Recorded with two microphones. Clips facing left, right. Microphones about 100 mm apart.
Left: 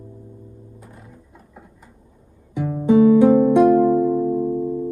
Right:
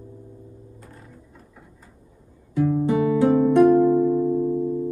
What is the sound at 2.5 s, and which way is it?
Music, 15° left (ahead or behind).